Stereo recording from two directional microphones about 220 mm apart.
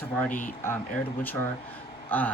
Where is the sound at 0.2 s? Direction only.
5° left (ahead or behind).